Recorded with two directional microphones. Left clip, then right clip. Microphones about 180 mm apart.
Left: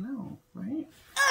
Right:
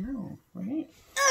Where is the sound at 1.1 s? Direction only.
5° left (ahead or behind).